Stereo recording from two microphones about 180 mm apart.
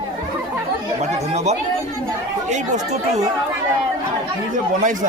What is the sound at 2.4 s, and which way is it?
Speech, 40° right (ahead or behind).